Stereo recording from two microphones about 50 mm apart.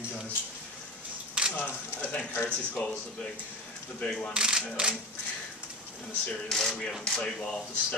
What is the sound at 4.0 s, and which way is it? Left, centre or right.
Speech, left.